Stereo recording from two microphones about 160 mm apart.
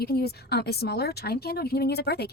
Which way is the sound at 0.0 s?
75° left (ahead or behind).